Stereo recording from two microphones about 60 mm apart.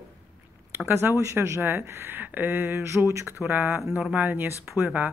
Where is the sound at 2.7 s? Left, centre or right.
Right.